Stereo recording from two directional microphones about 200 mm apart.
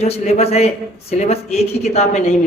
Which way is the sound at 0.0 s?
30° left (ahead or behind).